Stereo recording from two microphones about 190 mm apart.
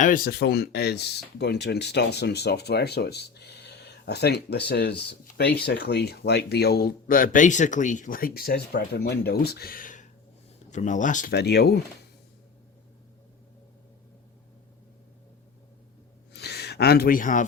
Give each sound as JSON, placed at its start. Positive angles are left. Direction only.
{"t": 0.0, "sound": "speech", "side_deg": 50}
{"t": 11.3, "sound": "speech", "side_deg": 60}
{"t": 16.3, "sound": "a sound", "side_deg": 60}